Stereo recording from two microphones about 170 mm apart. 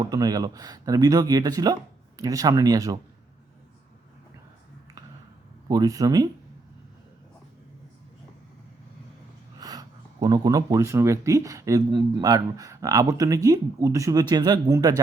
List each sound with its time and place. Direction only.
0.0 s speech: 25° right (ahead or behind)
5.6 s speech: 20° right (ahead or behind)
9.6 s speech: 20° right (ahead or behind)